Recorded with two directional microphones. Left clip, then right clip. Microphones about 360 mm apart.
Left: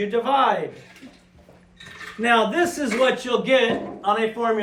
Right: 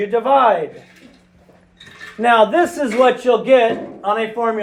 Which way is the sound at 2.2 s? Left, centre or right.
Centre.